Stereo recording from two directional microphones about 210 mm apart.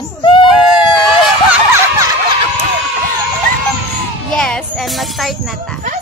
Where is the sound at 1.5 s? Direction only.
10° right (ahead or behind).